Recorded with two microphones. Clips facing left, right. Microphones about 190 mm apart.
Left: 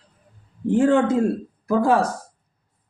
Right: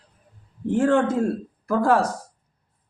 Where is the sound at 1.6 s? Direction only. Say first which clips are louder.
Left 1 dB; 10° left (ahead or behind).